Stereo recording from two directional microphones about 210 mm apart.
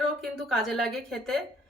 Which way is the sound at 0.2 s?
Centre (ahead or behind).